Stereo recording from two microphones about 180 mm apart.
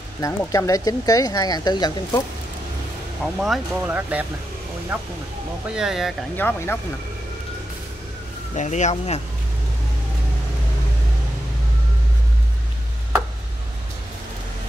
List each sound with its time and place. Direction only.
0.2 s speech: 15° left (ahead or behind)
3.3 s speech: 5° right (ahead or behind)
6.3 s speech: 10° left (ahead or behind)
8.5 s speech: 40° left (ahead or behind)